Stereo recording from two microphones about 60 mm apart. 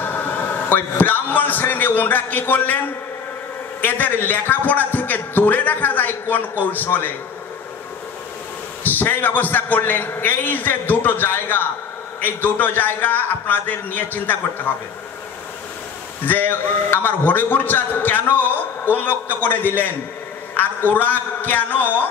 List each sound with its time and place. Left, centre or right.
0.0 s a man's voice: left
3.8 s a man's voice: left
8.8 s a man's voice: left
16.3 s a man's voice: left